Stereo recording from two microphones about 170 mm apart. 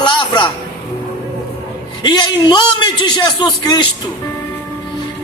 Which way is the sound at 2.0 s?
25° left (ahead or behind).